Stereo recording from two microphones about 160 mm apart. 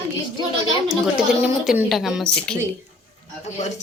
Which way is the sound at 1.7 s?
Centre (ahead or behind).